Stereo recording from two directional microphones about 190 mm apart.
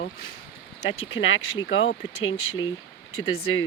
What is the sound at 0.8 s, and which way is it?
Speech, 80° left.